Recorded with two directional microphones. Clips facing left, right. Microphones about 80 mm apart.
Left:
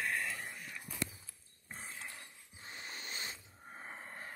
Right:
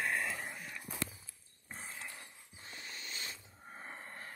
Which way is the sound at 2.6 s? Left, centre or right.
Left.